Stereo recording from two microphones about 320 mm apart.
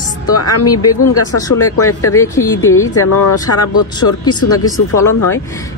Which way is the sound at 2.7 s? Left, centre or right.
Left.